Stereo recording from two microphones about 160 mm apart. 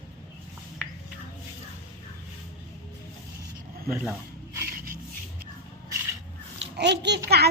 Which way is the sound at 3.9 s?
10° right (ahead or behind).